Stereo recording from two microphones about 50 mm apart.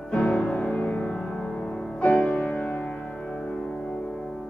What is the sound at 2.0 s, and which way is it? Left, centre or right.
Music, left.